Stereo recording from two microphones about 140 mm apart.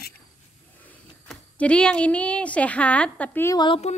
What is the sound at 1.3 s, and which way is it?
A woman's voice, 5° left (ahead or behind).